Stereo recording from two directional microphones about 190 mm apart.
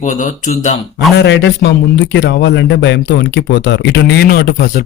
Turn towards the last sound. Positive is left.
turn(degrees=50)  # may be behind; listen again after turning